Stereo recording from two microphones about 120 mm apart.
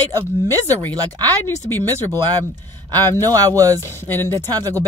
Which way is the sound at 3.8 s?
20° left (ahead or behind).